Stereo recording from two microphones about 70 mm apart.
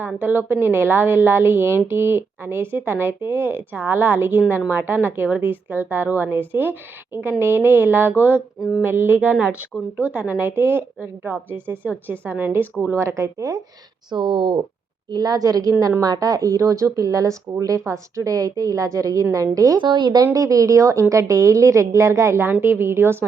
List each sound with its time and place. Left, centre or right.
0.2 s a woman's voice: right
9.2 s a woman's voice: centre
12.9 s speech: right
14.1 s speech: right
15.1 s a woman's voice: right
19.9 s speech: right
20.2 s a woman's voice: right